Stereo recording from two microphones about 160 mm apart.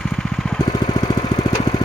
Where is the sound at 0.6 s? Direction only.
25° left (ahead or behind).